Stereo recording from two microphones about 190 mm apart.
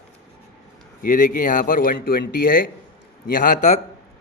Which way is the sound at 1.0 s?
45° left (ahead or behind).